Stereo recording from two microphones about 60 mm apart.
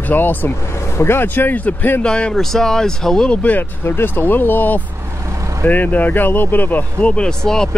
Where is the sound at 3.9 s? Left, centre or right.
Left; by 7.7 s centre.